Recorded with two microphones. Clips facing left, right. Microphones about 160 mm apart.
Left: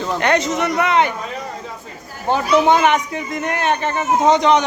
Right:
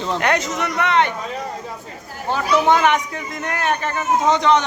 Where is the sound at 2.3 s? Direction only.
20° left (ahead or behind).